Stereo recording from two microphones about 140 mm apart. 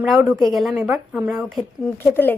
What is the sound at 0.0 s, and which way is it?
A woman's voice, 5° right (ahead or behind).